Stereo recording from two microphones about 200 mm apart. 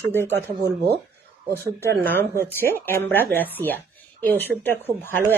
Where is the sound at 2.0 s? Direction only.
10° left (ahead or behind).